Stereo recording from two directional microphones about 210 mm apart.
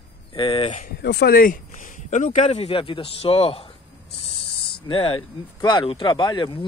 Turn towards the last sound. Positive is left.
turn(degrees=20)  # may be behind; listen again after turning